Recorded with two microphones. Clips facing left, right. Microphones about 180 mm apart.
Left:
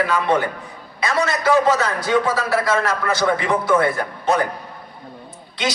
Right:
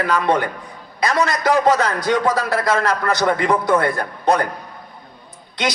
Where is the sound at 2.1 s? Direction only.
40° right (ahead or behind).